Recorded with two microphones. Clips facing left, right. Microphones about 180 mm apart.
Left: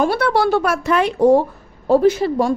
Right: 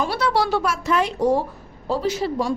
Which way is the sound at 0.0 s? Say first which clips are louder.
Left 5 dB; 55° left (ahead or behind).